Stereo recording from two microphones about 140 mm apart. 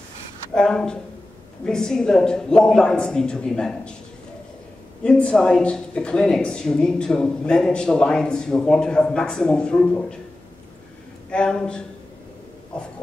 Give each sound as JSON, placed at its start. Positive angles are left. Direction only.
{"t": 0.6, "sound": "speech", "side_deg": 5}
{"t": 5.0, "sound": "speech", "side_deg": 5}
{"t": 11.2, "sound": "a man's voice", "side_deg": 5}